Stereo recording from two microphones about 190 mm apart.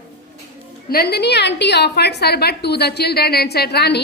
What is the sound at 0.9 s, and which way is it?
A woman's voice, 55° left (ahead or behind).